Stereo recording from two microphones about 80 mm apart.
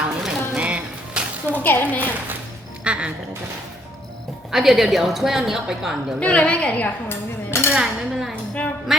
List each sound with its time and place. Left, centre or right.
0.2 s a sound: centre
1.6 s a woman's voice: left
2.8 s speech: centre
4.5 s a woman's voice: centre
6.1 s dishes: centre
7.7 s dishes: centre
8.9 s a sound: centre